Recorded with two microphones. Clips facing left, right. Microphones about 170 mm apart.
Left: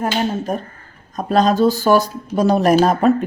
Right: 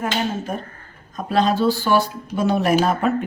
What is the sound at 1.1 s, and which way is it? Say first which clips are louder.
Speech: left 4 dB; 45° left (ahead or behind).